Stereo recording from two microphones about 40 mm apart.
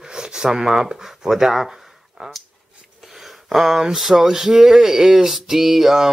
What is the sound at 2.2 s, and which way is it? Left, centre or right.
Speech, right.